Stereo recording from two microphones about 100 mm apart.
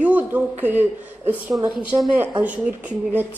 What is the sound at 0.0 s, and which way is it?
Speech, 15° right (ahead or behind).